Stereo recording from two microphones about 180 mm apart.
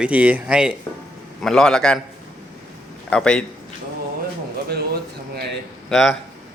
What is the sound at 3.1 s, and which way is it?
Speech, 5° left (ahead or behind).